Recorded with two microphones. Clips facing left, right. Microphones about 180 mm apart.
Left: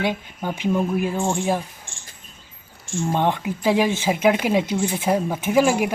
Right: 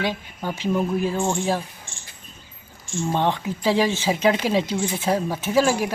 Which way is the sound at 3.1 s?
10° left (ahead or behind).